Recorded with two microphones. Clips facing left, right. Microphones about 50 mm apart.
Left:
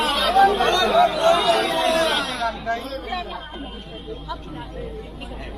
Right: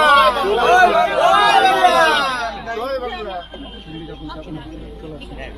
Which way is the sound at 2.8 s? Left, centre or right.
Right.